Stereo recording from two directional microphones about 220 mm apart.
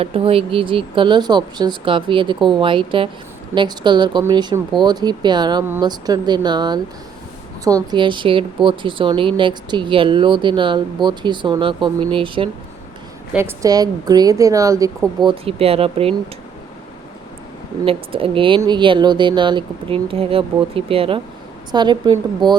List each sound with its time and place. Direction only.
0.0 s speech: 25° right (ahead or behind)
7.9 s a woman's voice: 20° right (ahead or behind)
17.8 s speech: 25° right (ahead or behind)